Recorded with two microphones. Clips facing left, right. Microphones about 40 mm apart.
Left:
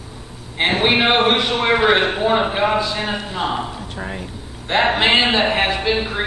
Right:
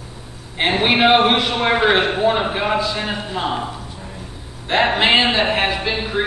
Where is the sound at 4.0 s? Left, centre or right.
Left.